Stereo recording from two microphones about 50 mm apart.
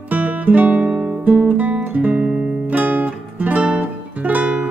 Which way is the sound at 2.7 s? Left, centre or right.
Right.